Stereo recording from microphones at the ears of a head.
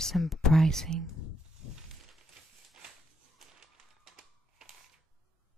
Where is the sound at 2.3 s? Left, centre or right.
Right.